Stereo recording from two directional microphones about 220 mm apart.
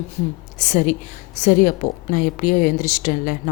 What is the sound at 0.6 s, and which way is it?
A woman's voice, 35° left (ahead or behind).